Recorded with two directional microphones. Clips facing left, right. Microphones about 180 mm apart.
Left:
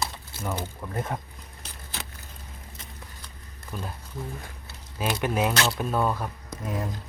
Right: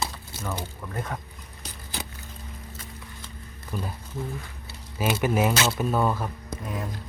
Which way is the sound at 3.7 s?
5° right (ahead or behind).